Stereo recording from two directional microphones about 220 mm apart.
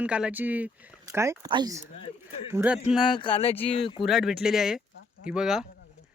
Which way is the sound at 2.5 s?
5° right (ahead or behind).